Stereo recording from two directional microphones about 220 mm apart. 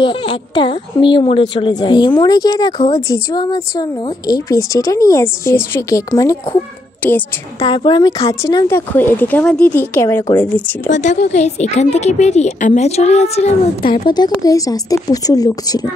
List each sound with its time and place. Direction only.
0.0 s a woman's voice: 20° left (ahead or behind)
7.6 s speech: 20° left (ahead or behind)
10.9 s a woman's voice: 35° left (ahead or behind); by 15.9 s 15° left (ahead or behind)